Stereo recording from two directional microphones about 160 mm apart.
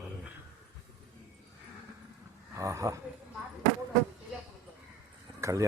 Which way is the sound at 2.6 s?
20° right (ahead or behind).